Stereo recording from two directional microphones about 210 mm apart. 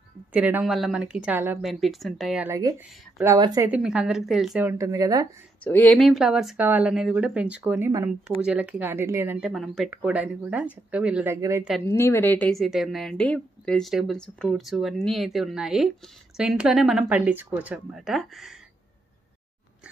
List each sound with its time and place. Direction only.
0.3 s a woman's voice: 10° right (ahead or behind)
3.7 s speech: 5° right (ahead or behind)
5.6 s a woman's voice: 5° left (ahead or behind); by 11.6 s 15° right (ahead or behind)
11.8 s a woman's voice: 10° left (ahead or behind)